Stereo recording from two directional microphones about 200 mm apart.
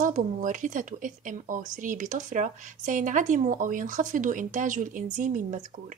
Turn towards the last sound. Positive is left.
turn(degrees=-40)  # may be behind; listen again after turning